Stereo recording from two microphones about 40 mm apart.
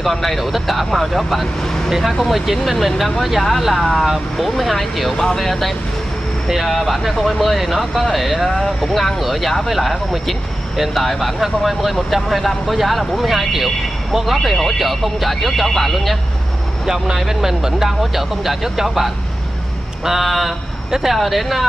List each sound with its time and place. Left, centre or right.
0.0 s speech: centre
16.8 s speech: centre